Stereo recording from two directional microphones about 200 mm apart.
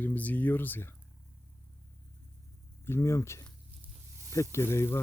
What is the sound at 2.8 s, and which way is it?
Speech, 15° left (ahead or behind).